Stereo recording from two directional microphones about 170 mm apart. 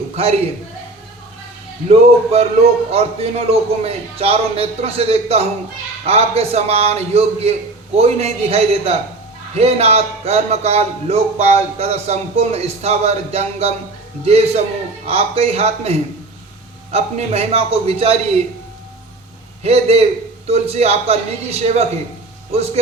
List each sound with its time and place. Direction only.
1.9 s a man's voice: 40° right (ahead or behind)
19.6 s a man's voice: 35° right (ahead or behind)